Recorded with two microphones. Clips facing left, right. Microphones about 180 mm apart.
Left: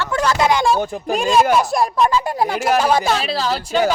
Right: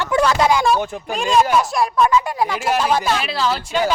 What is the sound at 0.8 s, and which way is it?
Speech, 40° left (ahead or behind).